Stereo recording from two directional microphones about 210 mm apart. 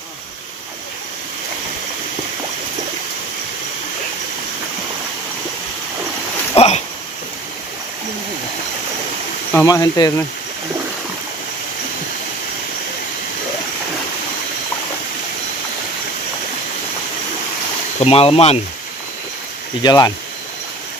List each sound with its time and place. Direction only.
6.6 s a sound: 30° left (ahead or behind)
9.5 s speech: 15° left (ahead or behind)
18.0 s speech: 30° left (ahead or behind)
19.8 s speech: 20° left (ahead or behind)